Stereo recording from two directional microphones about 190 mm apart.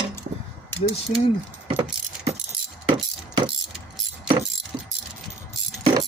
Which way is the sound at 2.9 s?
25° right (ahead or behind).